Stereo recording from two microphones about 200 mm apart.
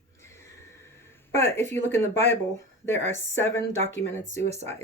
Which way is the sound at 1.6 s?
35° right (ahead or behind).